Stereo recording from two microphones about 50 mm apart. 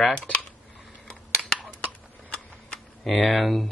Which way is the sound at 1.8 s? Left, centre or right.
Left.